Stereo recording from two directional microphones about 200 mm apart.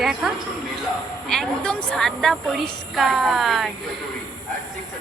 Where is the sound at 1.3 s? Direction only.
5° left (ahead or behind).